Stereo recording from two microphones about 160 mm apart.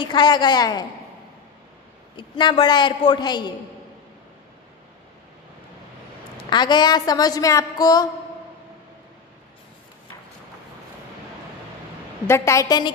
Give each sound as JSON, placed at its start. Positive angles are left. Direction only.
{"t": 0.0, "sound": "a woman's voice", "side_deg": 25}
{"t": 2.1, "sound": "a woman's voice", "side_deg": 30}
{"t": 6.3, "sound": "a woman's voice", "side_deg": 25}
{"t": 12.3, "sound": "a woman's voice", "side_deg": 15}